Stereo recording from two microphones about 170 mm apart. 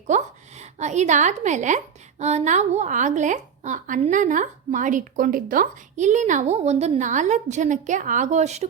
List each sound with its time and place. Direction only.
0.1 s a woman's voice: 40° right (ahead or behind)